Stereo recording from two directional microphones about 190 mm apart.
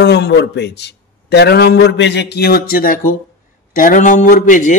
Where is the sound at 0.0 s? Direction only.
60° left (ahead or behind).